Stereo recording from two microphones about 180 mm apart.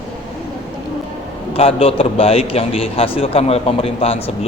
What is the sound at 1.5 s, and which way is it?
A man's voice, 30° left (ahead or behind).